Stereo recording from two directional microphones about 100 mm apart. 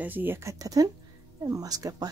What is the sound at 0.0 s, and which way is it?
Speech, 20° right (ahead or behind).